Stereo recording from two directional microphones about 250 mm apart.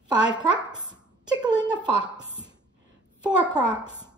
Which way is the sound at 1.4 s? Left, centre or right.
Centre.